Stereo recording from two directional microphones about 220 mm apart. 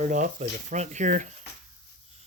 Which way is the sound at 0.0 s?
35° right (ahead or behind).